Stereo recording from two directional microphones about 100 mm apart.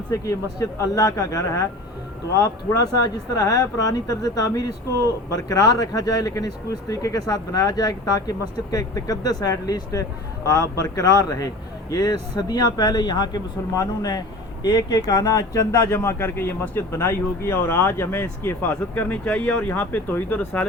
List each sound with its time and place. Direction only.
0.1 s speech: 30° left (ahead or behind)
3.3 s speech: 35° left (ahead or behind)
15.9 s speech: 25° left (ahead or behind)